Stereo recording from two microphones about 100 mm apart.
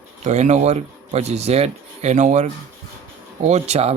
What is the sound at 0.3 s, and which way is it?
A man's voice, 90° right.